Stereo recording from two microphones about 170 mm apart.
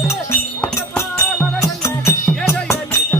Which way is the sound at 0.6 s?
15° left (ahead or behind).